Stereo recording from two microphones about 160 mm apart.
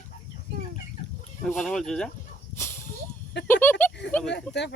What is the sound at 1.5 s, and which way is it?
Speech, centre (ahead or behind).